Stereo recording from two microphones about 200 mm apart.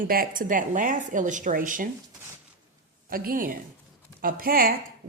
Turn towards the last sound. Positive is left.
turn(degrees=-45)  # may be behind; listen again after turning